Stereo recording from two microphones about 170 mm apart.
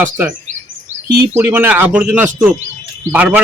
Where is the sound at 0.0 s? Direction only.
10° right (ahead or behind).